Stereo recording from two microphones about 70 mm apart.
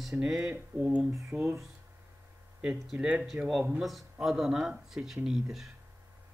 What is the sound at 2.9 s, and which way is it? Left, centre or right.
Speech, centre.